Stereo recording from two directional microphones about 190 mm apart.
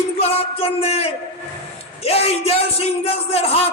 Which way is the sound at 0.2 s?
30° left (ahead or behind).